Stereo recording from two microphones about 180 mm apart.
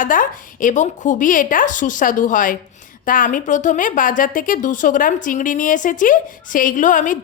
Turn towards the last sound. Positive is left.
turn(degrees=45)  # may be behind; listen again after turning